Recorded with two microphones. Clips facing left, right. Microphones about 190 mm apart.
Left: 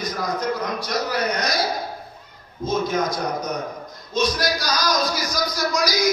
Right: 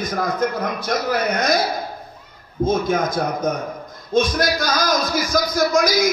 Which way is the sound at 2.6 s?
50° right (ahead or behind).